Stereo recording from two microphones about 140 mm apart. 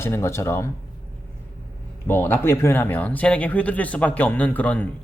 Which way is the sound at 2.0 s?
15° left (ahead or behind).